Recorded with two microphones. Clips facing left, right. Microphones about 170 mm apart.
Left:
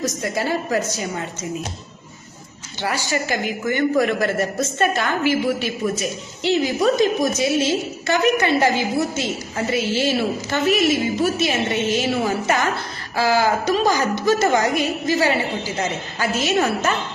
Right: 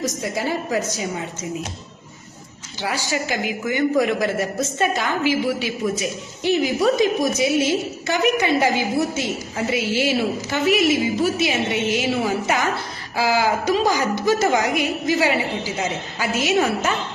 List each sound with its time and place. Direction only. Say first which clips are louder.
0.0 s a woman's voice: left 1 dB; 10° right (ahead or behind)
3.4 s a woman's voice: left 1 dB; 10° right (ahead or behind)
5.2 s a woman's voice: left 1 dB; 55° left (ahead or behind)
5.8 s a woman's voice: even; 15° right (ahead or behind)